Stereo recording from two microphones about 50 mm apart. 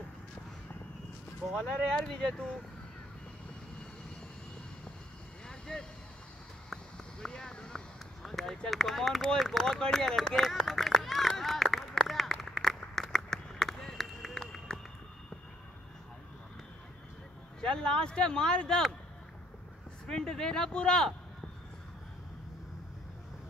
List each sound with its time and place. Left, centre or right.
1.5 s speech: centre
5.5 s vehicle: centre
6.7 s clip-clop: centre
7.6 s run: centre
12.1 s a sound: centre
17.6 s speech: centre
20.1 s speech: centre